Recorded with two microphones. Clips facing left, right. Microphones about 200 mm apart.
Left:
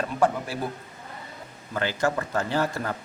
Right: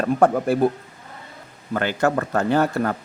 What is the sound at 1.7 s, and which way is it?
Speech, 55° right (ahead or behind).